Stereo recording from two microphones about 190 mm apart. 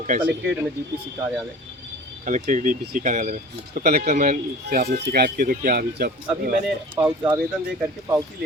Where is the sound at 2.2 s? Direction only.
40° right (ahead or behind).